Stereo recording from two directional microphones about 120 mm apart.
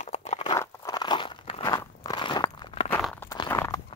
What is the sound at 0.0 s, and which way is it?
Crunch, 65° left (ahead or behind).